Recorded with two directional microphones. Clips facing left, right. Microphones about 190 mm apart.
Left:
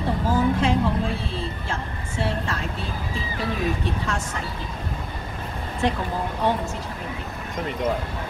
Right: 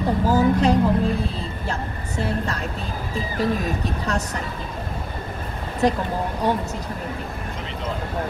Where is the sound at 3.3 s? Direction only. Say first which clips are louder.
Right 3 dB; 40° right (ahead or behind).